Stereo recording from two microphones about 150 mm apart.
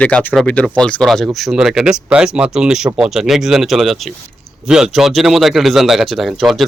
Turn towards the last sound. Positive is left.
turn(degrees=0)  # may be behind; listen again after turning